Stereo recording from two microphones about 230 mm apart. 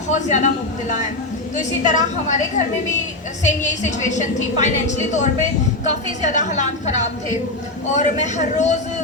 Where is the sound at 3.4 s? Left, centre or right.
Left.